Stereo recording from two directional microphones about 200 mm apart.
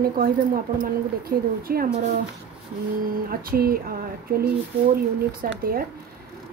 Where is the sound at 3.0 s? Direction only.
45° right (ahead or behind).